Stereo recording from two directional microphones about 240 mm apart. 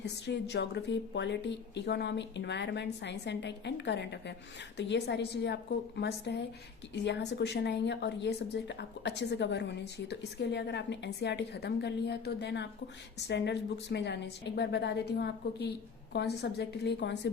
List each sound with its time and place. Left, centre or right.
0.0 s speech: left